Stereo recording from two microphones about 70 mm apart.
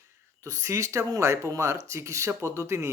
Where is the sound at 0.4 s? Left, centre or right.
Right.